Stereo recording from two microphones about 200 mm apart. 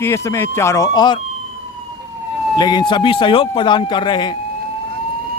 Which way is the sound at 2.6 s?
20° left (ahead or behind).